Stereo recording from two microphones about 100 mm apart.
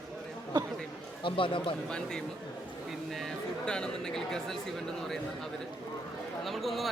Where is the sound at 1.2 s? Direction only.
60° left (ahead or behind).